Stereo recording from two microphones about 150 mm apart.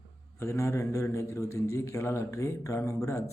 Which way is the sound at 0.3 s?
20° left (ahead or behind).